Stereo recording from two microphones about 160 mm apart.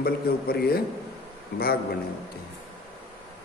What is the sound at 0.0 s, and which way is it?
Speech, 75° left (ahead or behind).